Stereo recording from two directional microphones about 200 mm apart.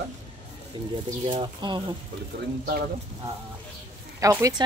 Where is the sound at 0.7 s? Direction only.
25° right (ahead or behind).